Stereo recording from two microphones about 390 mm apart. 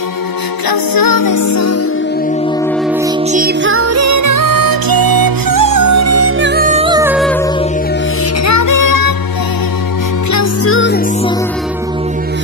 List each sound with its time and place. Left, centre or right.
0.7 s music: left
3.3 s music: right; by 7.4 s centre
8.5 s music: left
10.3 s music: left